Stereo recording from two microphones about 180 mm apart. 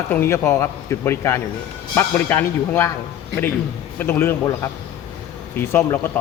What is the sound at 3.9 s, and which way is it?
A man's voice, 10° left (ahead or behind).